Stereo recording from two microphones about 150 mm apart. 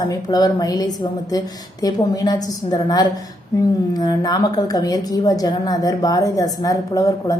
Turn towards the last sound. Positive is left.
turn(degrees=25)  # may be behind; listen again after turning